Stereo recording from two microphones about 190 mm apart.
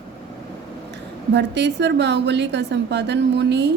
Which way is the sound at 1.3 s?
65° right (ahead or behind).